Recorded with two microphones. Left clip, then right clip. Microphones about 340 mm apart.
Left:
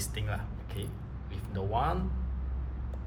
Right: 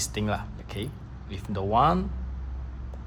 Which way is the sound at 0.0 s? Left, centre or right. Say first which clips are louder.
Right 9 dB; centre.